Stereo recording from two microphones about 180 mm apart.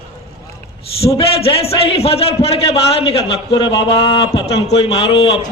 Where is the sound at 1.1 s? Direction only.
30° left (ahead or behind).